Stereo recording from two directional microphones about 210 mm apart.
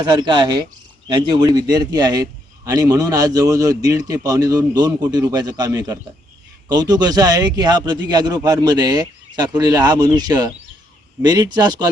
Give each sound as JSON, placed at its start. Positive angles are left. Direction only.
{"t": 0.0, "sound": "a man's voice", "side_deg": -20}